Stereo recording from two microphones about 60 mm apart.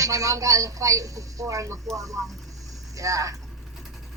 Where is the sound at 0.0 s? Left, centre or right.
Right.